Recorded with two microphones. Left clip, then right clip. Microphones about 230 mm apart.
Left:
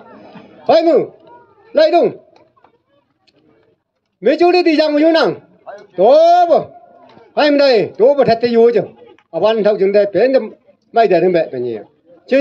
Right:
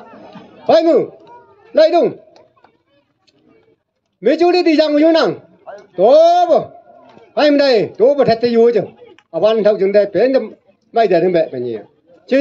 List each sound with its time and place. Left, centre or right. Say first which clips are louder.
0.2 s chatter: right 1 dB; left
1.7 s a man's voice: even; left
4.2 s a man's voice: left 1 dB; left